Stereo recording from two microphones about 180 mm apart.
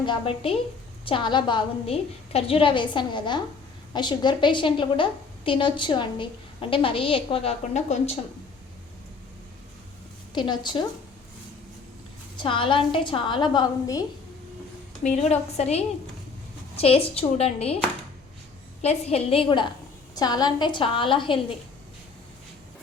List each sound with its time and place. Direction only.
0.0 s a woman's voice: 30° left (ahead or behind)
10.3 s a woman's voice: 25° left (ahead or behind)
12.4 s a woman's voice: 30° left (ahead or behind)
15.0 s a woman's voice: 40° left (ahead or behind)
18.8 s a woman's voice: 35° left (ahead or behind)